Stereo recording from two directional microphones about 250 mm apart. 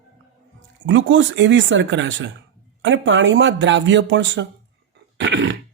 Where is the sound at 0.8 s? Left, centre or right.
Right.